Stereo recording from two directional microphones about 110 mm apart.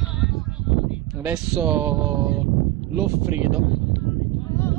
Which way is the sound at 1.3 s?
10° right (ahead or behind).